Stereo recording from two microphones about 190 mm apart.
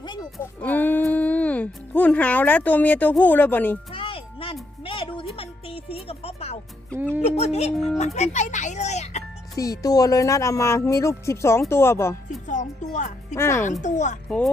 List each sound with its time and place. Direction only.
0.0 s music: 25° left (ahead or behind)
0.6 s speech: 10° left (ahead or behind)
3.9 s music: 30° left (ahead or behind)
4.8 s a sound: 25° left (ahead or behind)
5.3 s music: 30° left (ahead or behind)
7.3 s a child's voice: 35° left (ahead or behind)
9.6 s speech: 20° left (ahead or behind)
12.5 s speech: 40° left (ahead or behind)
13.3 s speech: 15° left (ahead or behind)
13.8 s a child's voice: 40° left (ahead or behind)
14.3 s speech: 5° left (ahead or behind)